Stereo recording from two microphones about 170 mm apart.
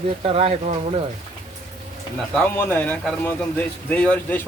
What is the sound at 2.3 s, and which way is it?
Speech, 10° left (ahead or behind).